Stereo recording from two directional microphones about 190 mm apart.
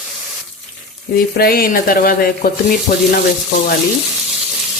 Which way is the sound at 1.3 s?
50° left (ahead or behind).